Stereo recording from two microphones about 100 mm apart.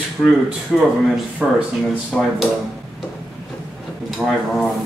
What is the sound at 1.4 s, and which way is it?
Speech, 10° right (ahead or behind).